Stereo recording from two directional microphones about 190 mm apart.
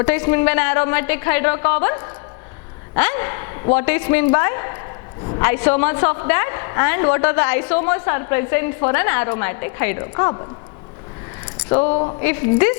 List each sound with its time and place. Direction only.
0.0 s a woman's voice: 10° left (ahead or behind)
11.9 s speech: 35° left (ahead or behind)
12.2 s a woman's voice: 15° left (ahead or behind)